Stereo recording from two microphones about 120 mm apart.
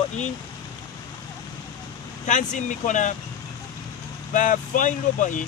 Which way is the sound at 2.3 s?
90° left.